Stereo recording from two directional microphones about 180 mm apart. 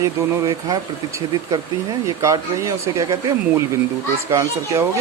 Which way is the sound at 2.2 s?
15° right (ahead or behind).